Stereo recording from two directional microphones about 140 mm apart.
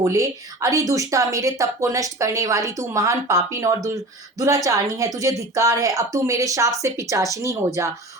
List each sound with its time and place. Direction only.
0.0 s a woman's voice: 20° right (ahead or behind)